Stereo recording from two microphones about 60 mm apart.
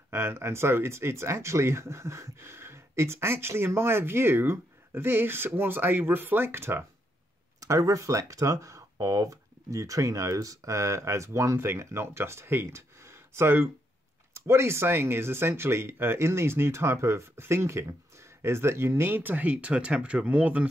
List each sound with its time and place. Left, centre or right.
0.1 s speech: right
7.6 s speech: right